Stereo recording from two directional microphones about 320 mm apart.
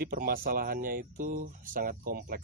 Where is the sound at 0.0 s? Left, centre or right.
Right.